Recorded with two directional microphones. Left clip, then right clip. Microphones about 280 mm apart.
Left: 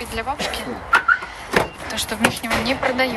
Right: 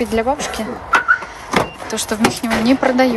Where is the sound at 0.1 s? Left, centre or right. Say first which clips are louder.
Right 6 dB; right.